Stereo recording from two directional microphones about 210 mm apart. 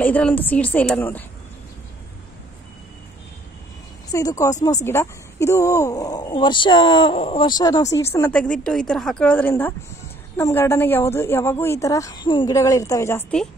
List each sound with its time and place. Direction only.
0.0 s speech: 10° left (ahead or behind)
4.1 s speech: 15° left (ahead or behind)